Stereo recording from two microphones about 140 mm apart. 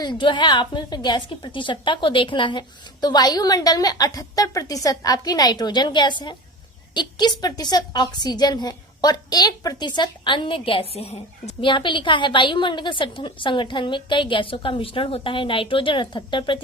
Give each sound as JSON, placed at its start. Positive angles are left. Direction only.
{"t": 0.0, "sound": "a woman's voice", "side_deg": 35}
{"t": 11.7, "sound": "a woman's voice", "side_deg": 35}